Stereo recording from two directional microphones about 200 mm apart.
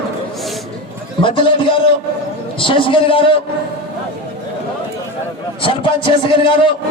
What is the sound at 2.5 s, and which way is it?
Speech, 25° left (ahead or behind).